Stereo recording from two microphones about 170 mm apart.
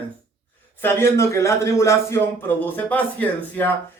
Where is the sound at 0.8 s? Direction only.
15° left (ahead or behind).